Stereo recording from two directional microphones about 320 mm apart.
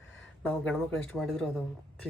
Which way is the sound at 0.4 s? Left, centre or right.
Centre.